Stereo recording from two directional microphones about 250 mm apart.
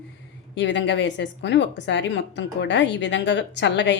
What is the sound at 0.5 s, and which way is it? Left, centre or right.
A woman's voice, left.